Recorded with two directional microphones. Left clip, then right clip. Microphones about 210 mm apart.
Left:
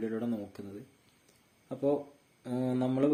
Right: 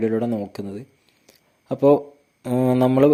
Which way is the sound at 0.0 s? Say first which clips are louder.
Right 13 dB; 40° right (ahead or behind).